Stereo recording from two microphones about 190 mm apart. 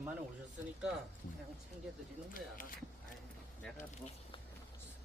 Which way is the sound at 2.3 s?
45° left (ahead or behind).